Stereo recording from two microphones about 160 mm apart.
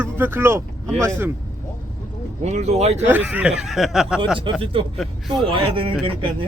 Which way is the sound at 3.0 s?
10° right (ahead or behind).